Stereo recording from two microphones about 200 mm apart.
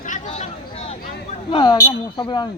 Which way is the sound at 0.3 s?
30° left (ahead or behind).